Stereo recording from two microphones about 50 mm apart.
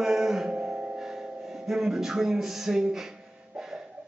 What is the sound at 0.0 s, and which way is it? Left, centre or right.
Music, centre.